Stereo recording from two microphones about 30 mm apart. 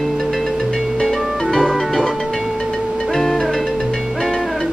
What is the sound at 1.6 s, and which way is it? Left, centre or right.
Music, centre.